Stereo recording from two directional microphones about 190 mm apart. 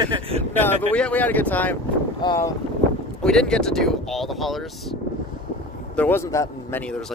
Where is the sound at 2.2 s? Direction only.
25° left (ahead or behind).